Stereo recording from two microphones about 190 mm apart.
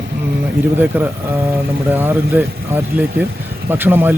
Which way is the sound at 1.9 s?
10° right (ahead or behind).